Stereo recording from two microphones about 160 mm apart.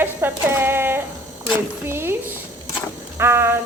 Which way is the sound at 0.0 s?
15° right (ahead or behind).